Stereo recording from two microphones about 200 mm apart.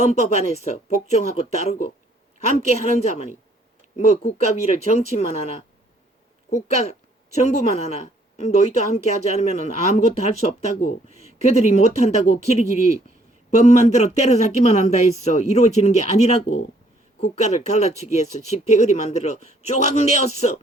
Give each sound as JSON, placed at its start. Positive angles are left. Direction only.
{"t": 0.0, "sound": "speech", "side_deg": 35}
{"t": 3.0, "sound": "speech", "side_deg": 35}
{"t": 7.3, "sound": "speech", "side_deg": 35}